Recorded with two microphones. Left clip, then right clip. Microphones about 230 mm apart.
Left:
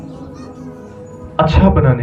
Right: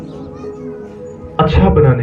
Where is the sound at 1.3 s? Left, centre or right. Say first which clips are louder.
Right 1 dB; left.